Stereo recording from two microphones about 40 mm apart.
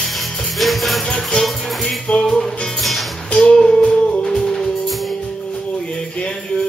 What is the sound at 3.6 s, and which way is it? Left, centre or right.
Music, centre.